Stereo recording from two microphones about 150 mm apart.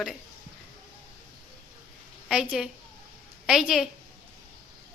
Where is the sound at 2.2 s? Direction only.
5° right (ahead or behind).